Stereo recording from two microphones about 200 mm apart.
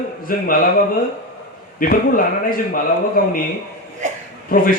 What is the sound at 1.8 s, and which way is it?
Speech, 45° left (ahead or behind).